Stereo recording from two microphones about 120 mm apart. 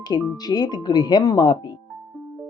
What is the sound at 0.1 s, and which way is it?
Speech, 35° left (ahead or behind).